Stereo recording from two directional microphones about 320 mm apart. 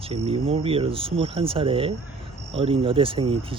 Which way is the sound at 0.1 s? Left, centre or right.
Centre.